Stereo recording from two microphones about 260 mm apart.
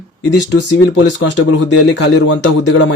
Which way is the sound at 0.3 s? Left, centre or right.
Left.